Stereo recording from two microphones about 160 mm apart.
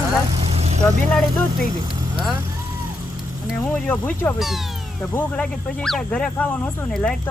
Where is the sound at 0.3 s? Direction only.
40° right (ahead or behind).